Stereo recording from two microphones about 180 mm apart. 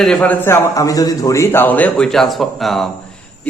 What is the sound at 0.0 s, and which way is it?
A man's voice, 5° left (ahead or behind).